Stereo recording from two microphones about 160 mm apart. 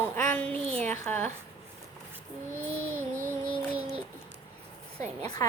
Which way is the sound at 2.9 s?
15° right (ahead or behind).